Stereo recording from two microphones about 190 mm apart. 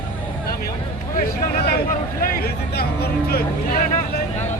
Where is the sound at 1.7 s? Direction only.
50° left (ahead or behind).